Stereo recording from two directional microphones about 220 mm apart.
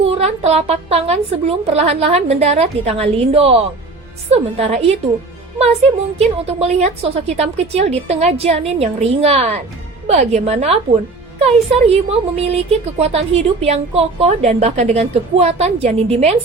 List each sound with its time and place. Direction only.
0.0 s a woman's voice: 25° right (ahead or behind)